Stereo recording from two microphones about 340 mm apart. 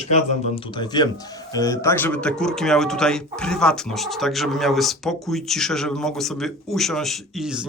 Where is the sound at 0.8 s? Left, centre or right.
Centre.